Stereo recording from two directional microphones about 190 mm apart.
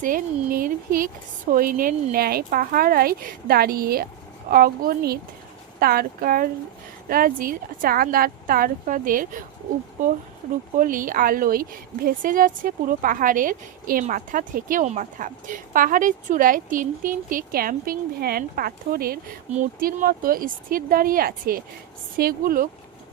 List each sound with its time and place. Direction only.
0.0 s a woman's voice: 45° right (ahead or behind)
10.8 s a woman's voice: 45° right (ahead or behind)